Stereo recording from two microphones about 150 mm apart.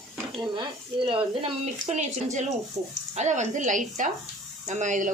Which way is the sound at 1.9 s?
50° right (ahead or behind).